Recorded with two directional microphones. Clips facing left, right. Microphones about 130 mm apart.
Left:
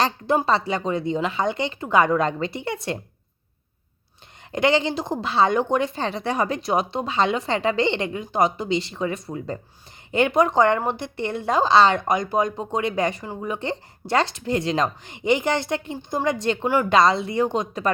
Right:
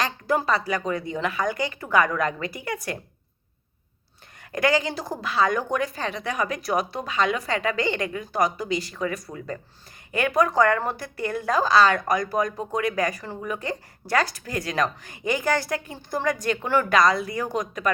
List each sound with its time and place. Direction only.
0.4 s a woman's voice: 25° left (ahead or behind)
4.5 s a woman's voice: 25° left (ahead or behind)